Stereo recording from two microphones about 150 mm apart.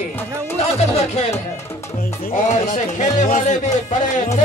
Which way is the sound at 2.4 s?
55° left (ahead or behind).